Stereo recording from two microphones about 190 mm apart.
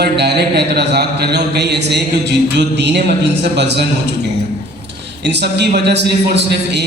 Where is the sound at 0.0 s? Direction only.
60° right (ahead or behind).